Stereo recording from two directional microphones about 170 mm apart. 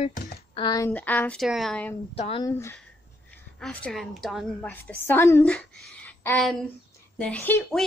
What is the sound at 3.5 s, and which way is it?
Speech, 5° left (ahead or behind).